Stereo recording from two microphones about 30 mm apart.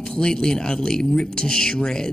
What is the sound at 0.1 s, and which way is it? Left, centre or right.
Speech, left.